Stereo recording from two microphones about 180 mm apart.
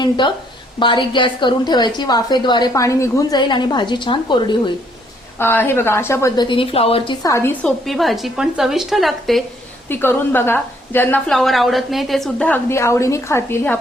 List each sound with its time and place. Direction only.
0.8 s a woman's voice: 25° left (ahead or behind)
5.4 s a woman's voice: 10° left (ahead or behind)
7.9 s a woman's voice: centre (ahead or behind)
9.9 s a woman's voice: 10° left (ahead or behind)